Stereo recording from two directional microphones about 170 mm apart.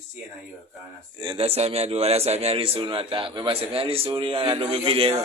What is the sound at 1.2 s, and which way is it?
A man's voice, 30° right (ahead or behind).